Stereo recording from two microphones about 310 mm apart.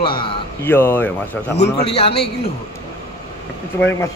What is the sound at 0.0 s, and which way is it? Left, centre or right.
A man's voice, centre.